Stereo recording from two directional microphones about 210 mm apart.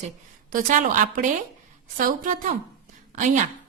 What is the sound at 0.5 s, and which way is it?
Speech, 40° right (ahead or behind).